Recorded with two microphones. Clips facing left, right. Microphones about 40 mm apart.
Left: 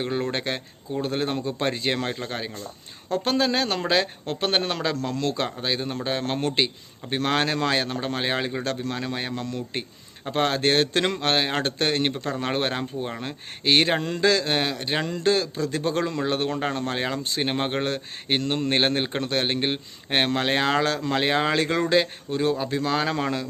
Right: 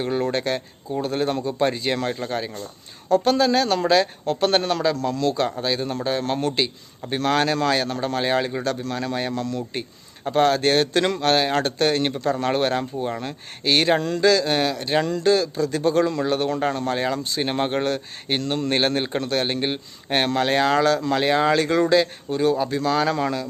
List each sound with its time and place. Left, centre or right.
0.0 s speech: centre; by 5.5 s left
5.6 s speech: left
17.4 s speech: centre